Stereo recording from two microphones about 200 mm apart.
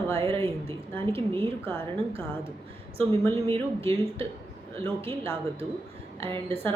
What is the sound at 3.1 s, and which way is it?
A woman's voice, 30° right (ahead or behind).